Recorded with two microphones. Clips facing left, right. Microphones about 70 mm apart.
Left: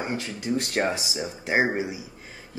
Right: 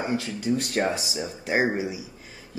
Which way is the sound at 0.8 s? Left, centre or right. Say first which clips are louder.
Even; left.